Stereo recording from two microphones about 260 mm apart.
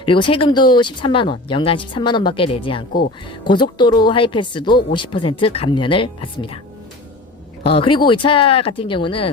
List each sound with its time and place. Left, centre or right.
0.0 s speech: centre
7.6 s speech: centre